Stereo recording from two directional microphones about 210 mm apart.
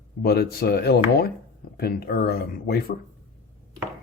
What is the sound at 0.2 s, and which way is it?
Speech, 50° left (ahead or behind).